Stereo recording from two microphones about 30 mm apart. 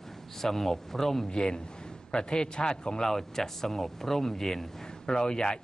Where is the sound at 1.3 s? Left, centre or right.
Left.